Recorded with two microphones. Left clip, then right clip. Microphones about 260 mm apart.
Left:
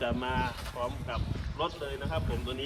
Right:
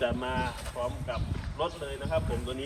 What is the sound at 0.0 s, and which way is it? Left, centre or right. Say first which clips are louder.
Speech: right 1 dB; centre.